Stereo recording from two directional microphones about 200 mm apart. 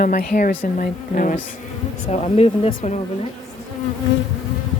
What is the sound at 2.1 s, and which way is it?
Speech, 30° left (ahead or behind).